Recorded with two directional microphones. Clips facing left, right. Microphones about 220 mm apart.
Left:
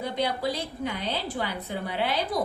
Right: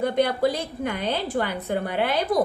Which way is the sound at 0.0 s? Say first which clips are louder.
Right 7 dB; 55° right (ahead or behind).